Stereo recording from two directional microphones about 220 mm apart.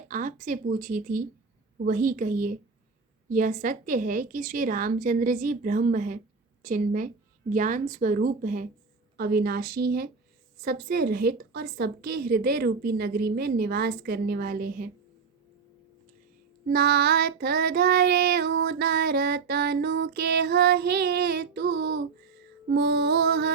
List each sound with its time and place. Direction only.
0.1 s a woman's voice: 35° right (ahead or behind)
9.1 s child singing: 45° right (ahead or behind)
16.6 s child singing: 45° right (ahead or behind)